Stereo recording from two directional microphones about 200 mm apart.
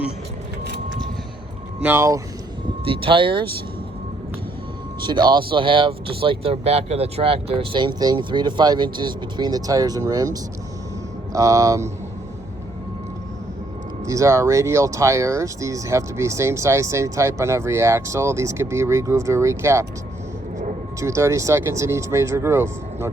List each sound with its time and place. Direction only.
1.8 s speech: 10° right (ahead or behind)
2.8 s speech: 25° right (ahead or behind)
4.9 s speech: 20° right (ahead or behind)
11.3 s speech: 15° right (ahead or behind)
14.0 s speech: 15° right (ahead or behind)
21.0 s speech: 15° right (ahead or behind)